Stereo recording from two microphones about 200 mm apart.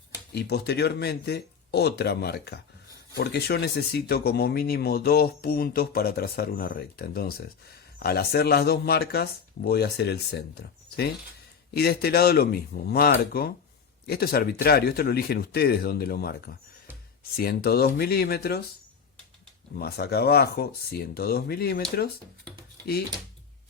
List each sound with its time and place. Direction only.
0.3 s speech: 55° left (ahead or behind)
19.7 s speech: 50° left (ahead or behind)